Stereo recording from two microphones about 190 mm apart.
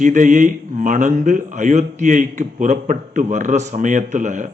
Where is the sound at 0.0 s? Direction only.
40° right (ahead or behind).